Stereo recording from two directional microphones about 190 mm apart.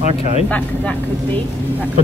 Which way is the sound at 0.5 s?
5° left (ahead or behind).